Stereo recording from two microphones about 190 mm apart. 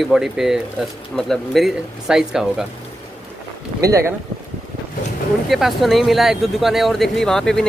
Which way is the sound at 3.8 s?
15° right (ahead or behind).